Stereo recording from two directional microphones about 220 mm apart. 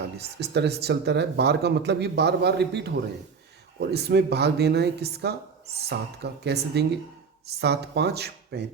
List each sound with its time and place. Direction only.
0.0 s speech: 50° right (ahead or behind)